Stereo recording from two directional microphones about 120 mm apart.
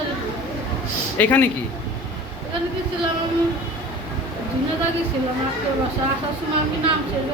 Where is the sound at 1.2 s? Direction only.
15° left (ahead or behind).